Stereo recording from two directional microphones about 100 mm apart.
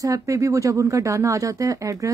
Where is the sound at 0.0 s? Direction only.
35° right (ahead or behind).